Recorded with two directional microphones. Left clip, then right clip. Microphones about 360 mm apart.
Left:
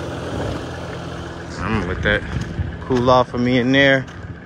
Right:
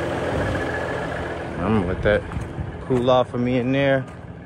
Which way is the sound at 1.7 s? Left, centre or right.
Centre.